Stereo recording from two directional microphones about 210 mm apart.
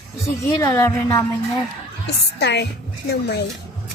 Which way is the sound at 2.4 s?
55° left (ahead or behind).